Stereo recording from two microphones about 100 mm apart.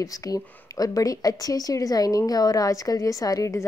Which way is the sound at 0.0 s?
35° left (ahead or behind).